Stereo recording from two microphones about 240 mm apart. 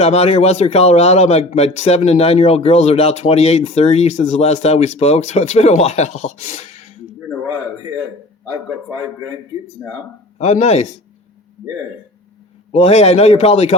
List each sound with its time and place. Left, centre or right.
0.0 s a man's voice: left
9.8 s speech: centre
10.3 s a man's voice: left
12.7 s a man's voice: left